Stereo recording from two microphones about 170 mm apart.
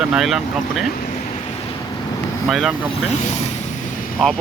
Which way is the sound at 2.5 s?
Centre (ahead or behind).